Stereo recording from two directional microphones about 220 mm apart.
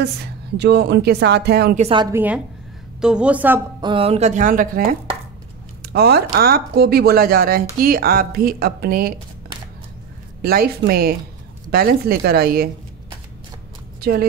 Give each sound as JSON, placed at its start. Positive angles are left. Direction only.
{"t": 0.0, "sound": "speech", "side_deg": -50}
{"t": 1.8, "sound": "a woman's voice", "side_deg": -20}
{"t": 2.1, "sound": "a woman's voice", "side_deg": -5}
{"t": 3.8, "sound": "a woman's voice", "side_deg": -25}
{"t": 10.4, "sound": "speech", "side_deg": -45}